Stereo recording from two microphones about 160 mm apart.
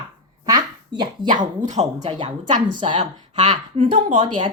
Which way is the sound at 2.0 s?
30° right (ahead or behind).